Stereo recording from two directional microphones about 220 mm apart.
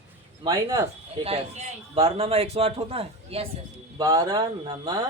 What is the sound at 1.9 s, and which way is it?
A man's voice, 25° right (ahead or behind).